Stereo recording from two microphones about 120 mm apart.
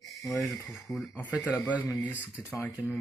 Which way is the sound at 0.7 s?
25° left (ahead or behind).